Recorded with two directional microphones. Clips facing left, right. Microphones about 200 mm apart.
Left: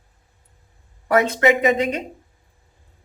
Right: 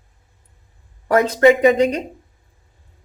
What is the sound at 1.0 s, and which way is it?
Speech, 35° right (ahead or behind).